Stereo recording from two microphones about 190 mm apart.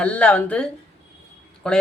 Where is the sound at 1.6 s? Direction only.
5° left (ahead or behind).